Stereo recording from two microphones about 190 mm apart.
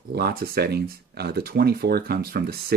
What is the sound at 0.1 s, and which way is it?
Speech, 55° right (ahead or behind).